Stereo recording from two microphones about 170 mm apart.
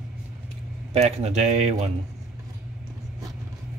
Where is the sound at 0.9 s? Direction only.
40° right (ahead or behind).